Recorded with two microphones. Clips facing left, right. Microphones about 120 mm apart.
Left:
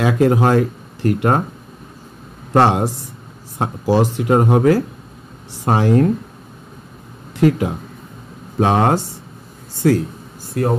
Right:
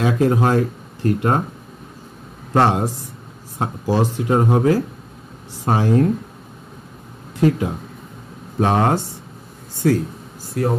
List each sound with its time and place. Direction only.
0.0 s speech: 75° left (ahead or behind)
2.5 s speech: 75° left (ahead or behind)
7.3 s speech: 70° left (ahead or behind)
8.5 s speech: 90° left